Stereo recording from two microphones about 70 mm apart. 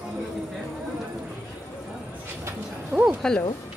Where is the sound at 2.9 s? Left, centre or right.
Centre.